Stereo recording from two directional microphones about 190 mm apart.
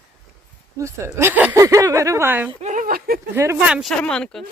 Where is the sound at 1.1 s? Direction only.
10° right (ahead or behind).